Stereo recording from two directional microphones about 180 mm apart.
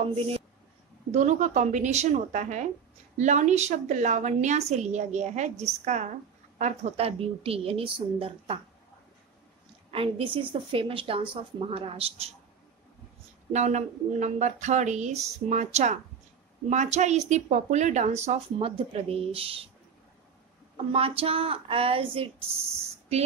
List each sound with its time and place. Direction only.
0.0 s speech: 35° right (ahead or behind)
9.8 s speech: 30° right (ahead or behind)
13.5 s speech: 40° right (ahead or behind)
20.7 s speech: 35° right (ahead or behind)